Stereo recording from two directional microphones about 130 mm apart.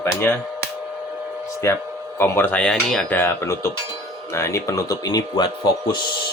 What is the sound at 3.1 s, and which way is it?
Speech, 15° left (ahead or behind).